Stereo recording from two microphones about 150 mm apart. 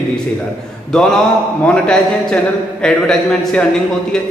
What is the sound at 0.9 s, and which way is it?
A man's voice, 5° left (ahead or behind).